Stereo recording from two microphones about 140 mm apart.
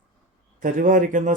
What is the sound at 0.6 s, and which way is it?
Speech, 70° right (ahead or behind).